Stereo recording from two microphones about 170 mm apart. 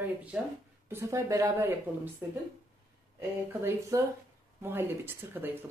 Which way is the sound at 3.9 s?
20° right (ahead or behind).